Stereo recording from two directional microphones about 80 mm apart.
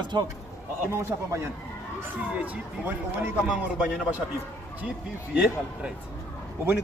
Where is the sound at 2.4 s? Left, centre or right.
Right.